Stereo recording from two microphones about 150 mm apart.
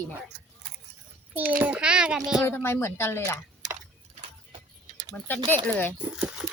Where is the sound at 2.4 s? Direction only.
15° left (ahead or behind).